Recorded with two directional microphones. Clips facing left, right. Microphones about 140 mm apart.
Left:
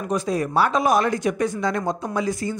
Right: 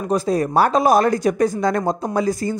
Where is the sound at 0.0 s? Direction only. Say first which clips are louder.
Right 4 dB; 35° right (ahead or behind).